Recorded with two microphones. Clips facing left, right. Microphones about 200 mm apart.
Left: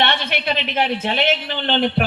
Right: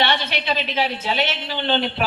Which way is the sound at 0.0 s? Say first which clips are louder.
Left 1 dB; 55° left (ahead or behind).